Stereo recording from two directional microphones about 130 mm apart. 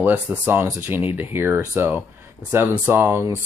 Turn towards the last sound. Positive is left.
turn(degrees=-20)  # may be behind; listen again after turning